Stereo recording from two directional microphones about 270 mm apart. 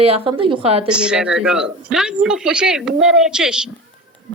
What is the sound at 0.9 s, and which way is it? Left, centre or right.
A woman's voice, centre.